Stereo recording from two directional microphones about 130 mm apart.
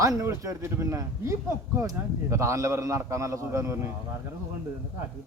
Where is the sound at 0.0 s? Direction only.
25° right (ahead or behind).